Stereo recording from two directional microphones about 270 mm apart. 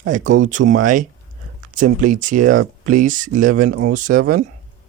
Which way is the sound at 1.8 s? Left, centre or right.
Right.